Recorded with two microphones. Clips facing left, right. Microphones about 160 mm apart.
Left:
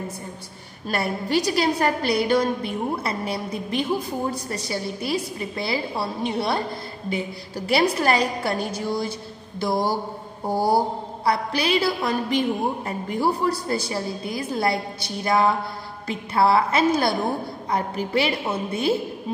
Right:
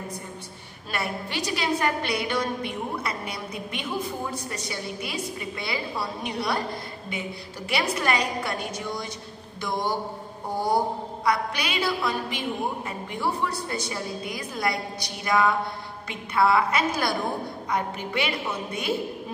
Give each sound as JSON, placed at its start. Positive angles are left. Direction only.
{"t": 0.8, "sound": "a woman's voice", "side_deg": 40}